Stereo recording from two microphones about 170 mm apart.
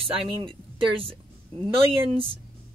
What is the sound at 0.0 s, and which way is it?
Speech, 35° right (ahead or behind).